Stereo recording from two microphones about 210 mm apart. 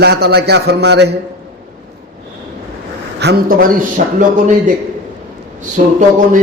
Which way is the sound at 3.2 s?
45° right (ahead or behind).